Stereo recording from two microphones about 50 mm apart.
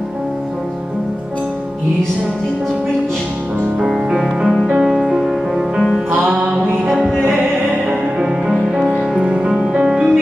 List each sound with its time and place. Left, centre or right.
3.8 s music: centre
7.1 s music: centre
9.2 s music: centre